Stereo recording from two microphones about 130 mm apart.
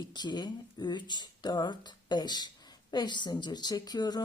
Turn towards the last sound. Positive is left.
turn(degrees=30)  # may be behind; listen again after turning